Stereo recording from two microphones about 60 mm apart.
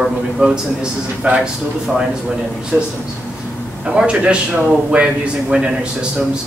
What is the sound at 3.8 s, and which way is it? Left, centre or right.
A man's voice, centre.